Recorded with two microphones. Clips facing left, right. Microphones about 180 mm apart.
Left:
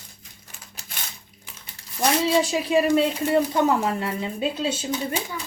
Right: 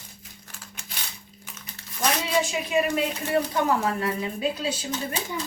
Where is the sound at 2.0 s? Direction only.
35° left (ahead or behind).